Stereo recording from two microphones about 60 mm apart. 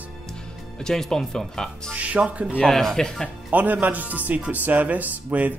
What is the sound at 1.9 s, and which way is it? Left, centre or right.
Speech, right.